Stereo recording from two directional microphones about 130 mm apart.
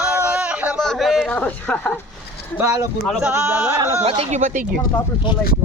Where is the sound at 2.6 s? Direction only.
25° right (ahead or behind).